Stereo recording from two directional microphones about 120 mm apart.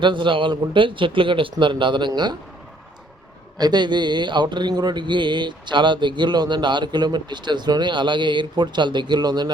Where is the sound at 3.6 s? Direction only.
35° right (ahead or behind).